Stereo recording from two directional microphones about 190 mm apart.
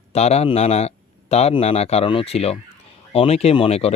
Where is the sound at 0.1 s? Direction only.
35° left (ahead or behind).